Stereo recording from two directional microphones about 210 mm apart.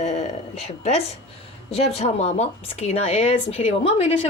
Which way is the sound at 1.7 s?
30° left (ahead or behind).